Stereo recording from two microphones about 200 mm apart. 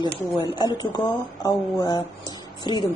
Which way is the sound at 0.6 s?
20° left (ahead or behind).